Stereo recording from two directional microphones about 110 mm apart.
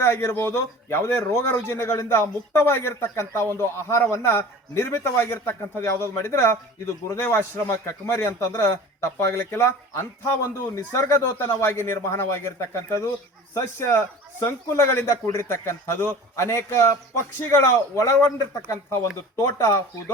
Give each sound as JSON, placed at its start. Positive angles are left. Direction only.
{"t": 0.0, "sound": "a man's voice", "side_deg": 20}